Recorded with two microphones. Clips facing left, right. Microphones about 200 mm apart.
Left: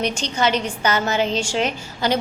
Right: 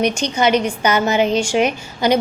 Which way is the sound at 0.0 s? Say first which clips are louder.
Right 4 dB; 15° right (ahead or behind).